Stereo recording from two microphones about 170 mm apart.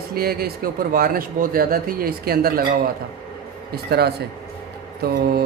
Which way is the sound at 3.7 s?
70° right (ahead or behind).